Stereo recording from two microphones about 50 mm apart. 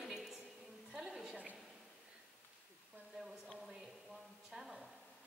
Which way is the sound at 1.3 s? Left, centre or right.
Right.